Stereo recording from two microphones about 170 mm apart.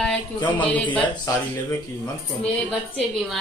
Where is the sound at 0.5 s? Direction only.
10° left (ahead or behind).